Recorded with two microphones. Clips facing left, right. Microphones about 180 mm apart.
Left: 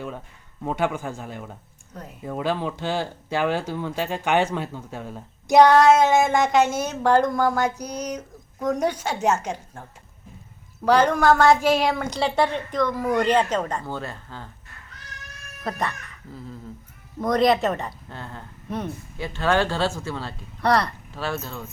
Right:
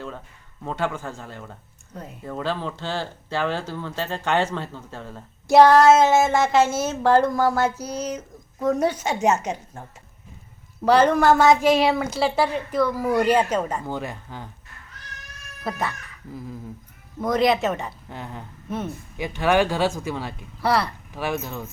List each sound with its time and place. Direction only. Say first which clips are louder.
0.6 s speech: left 2 dB; 15° left (ahead or behind)
5.5 s child singing: right 1 dB; centre (ahead or behind)
8.0 s a woman's voice: right 1 dB; 5° right (ahead or behind)
10.8 s a woman's voice: right 1 dB; 10° right (ahead or behind)
15.6 s child singing: even; 5° right (ahead or behind)
17.2 s child singing: left 1 dB; centre (ahead or behind)
18.1 s a woman's voice: right 2 dB; 15° right (ahead or behind)
21.1 s a woman's voice: right 2 dB; 15° right (ahead or behind)